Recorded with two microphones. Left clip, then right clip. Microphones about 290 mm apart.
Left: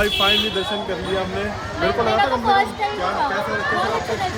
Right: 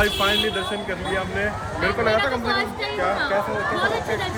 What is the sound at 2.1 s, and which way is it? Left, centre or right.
Speech, left.